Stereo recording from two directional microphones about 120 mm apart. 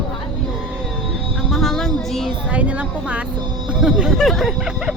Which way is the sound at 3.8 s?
5° right (ahead or behind).